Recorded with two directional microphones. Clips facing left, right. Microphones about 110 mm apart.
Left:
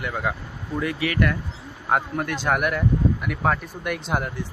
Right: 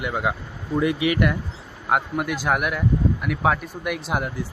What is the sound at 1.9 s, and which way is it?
Speech, 5° right (ahead or behind).